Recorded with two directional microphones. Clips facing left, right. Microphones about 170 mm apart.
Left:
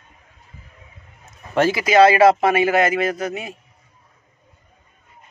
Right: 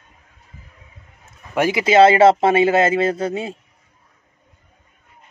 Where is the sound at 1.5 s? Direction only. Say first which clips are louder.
Right 1 dB; 15° right (ahead or behind).